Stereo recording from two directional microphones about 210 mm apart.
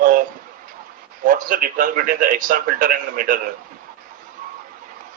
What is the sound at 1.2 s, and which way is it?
A man's voice, 40° right (ahead or behind).